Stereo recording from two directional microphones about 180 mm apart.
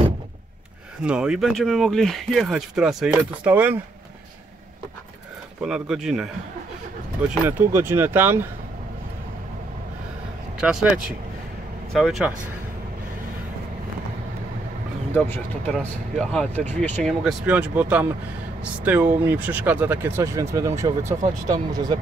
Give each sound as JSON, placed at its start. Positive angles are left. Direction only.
{"t": 1.0, "sound": "speech", "side_deg": -5}
{"t": 5.6, "sound": "speech", "side_deg": -5}
{"t": 7.2, "sound": "speech", "side_deg": -10}
{"t": 10.6, "sound": "speech", "side_deg": -5}
{"t": 15.1, "sound": "speech", "side_deg": 10}